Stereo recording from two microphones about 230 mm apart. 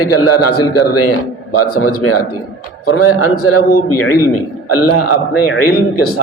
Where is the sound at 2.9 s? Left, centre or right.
Left.